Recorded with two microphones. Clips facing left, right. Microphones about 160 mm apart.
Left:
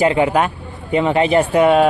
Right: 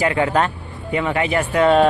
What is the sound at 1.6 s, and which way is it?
Speech, 10° left (ahead or behind).